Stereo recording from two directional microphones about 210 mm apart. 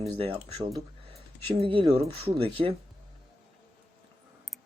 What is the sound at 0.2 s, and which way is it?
Speech, 25° right (ahead or behind).